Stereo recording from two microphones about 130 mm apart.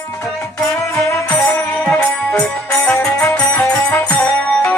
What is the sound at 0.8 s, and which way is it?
Music, 20° left (ahead or behind).